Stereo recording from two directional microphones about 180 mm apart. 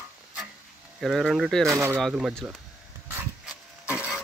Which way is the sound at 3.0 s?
5° right (ahead or behind).